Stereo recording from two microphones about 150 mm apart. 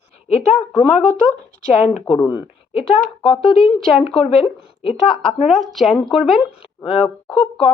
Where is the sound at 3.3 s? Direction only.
35° left (ahead or behind).